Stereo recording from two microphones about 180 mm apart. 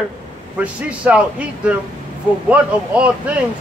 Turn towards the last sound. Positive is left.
turn(degrees=-5)  # may be behind; listen again after turning